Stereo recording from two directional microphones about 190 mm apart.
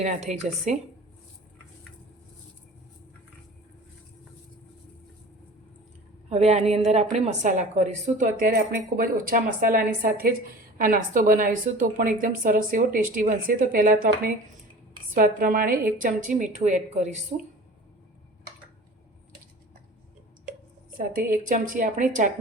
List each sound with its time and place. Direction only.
0.0 s a woman's voice: 35° right (ahead or behind)
6.3 s a woman's voice: 35° right (ahead or behind)
21.0 s a woman's voice: 45° right (ahead or behind)